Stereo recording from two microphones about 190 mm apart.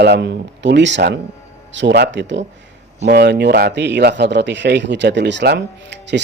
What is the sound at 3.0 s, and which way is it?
A man's voice, 60° right (ahead or behind).